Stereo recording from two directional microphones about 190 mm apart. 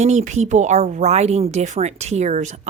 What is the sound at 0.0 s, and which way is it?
Speech, 35° right (ahead or behind).